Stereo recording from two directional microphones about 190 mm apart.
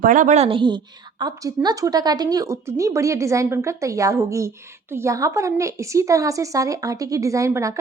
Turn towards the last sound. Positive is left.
turn(degrees=-15)  # may be behind; listen again after turning